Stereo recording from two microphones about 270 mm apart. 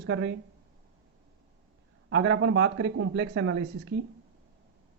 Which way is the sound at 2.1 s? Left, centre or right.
Right.